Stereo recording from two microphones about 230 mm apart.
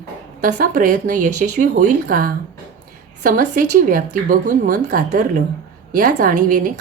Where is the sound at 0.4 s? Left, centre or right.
Right.